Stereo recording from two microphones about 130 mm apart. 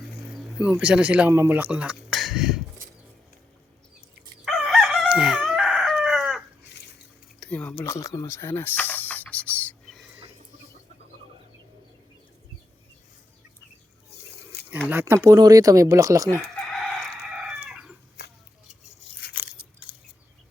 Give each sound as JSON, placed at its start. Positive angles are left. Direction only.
{"t": 0.3, "sound": "speech", "side_deg": -5}
{"t": 4.4, "sound": "chicken", "side_deg": 0}
{"t": 7.3, "sound": "snake", "side_deg": 10}
{"t": 14.8, "sound": "speech", "side_deg": -15}
{"t": 16.8, "sound": "chicken", "side_deg": 0}